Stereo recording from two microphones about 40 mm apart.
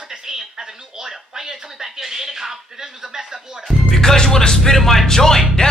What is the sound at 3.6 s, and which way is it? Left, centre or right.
Speech, centre.